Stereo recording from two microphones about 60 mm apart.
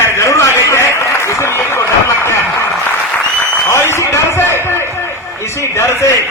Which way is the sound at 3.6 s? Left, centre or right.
Left.